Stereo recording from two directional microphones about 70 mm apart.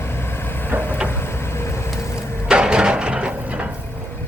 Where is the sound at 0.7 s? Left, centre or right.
Right.